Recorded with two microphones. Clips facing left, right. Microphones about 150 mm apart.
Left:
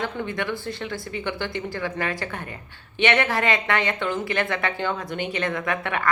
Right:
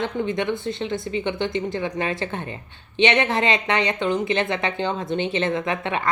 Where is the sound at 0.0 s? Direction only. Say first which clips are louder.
Right 4 dB; 20° right (ahead or behind).